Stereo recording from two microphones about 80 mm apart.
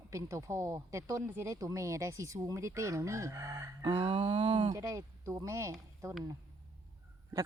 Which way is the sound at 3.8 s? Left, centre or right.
Right.